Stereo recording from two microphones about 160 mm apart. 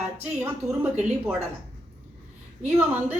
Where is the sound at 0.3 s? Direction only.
10° right (ahead or behind).